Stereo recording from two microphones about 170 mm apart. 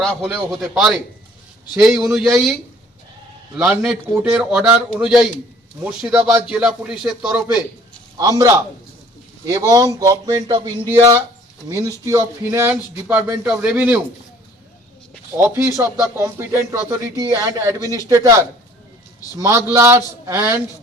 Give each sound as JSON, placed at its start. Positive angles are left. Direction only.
{"t": 0.0, "sound": "a man's voice", "side_deg": -5}
{"t": 3.6, "sound": "a man's voice", "side_deg": -5}
{"t": 8.2, "sound": "a man's voice", "side_deg": -20}
{"t": 15.4, "sound": "a man's voice", "side_deg": -15}
{"t": 19.4, "sound": "speech", "side_deg": -15}